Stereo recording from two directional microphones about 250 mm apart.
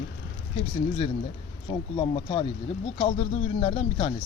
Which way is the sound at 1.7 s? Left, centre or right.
Left.